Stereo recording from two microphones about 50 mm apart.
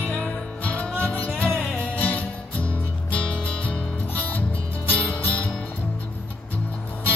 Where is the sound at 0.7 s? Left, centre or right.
Left.